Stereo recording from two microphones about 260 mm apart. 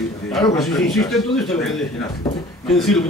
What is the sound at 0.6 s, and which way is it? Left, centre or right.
Speech, centre.